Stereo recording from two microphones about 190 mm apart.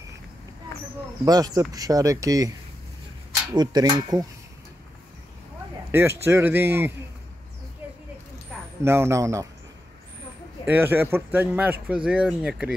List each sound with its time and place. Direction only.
1.2 s speech: 20° right (ahead or behind)
3.5 s speech: 20° right (ahead or behind)
5.9 s a man's voice: 15° right (ahead or behind)
7.8 s a sound: 10° right (ahead or behind)
8.8 s speech: 15° right (ahead or behind)
10.7 s speech: 10° right (ahead or behind)